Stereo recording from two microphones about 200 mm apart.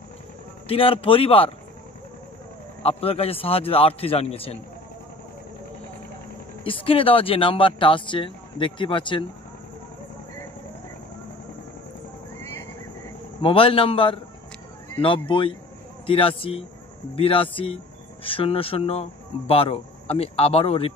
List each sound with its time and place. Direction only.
0.7 s speech: 30° left (ahead or behind)
2.8 s speech: 30° left (ahead or behind)
6.6 s speech: 25° left (ahead or behind)
13.4 s speech: 25° left (ahead or behind)